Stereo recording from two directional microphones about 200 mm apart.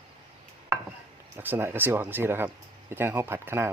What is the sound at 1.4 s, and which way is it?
Speech, 10° right (ahead or behind).